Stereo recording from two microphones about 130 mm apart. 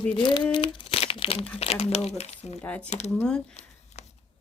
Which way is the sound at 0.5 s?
40° left (ahead or behind).